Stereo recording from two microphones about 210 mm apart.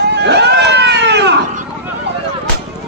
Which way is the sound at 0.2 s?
55° right (ahead or behind).